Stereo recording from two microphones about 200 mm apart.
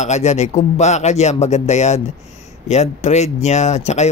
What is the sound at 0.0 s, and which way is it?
Speech, 35° left (ahead or behind).